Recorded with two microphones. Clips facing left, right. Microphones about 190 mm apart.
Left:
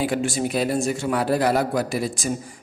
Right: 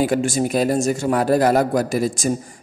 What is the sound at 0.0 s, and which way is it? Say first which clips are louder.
A man's voice: right 4 dB; 45° right (ahead or behind).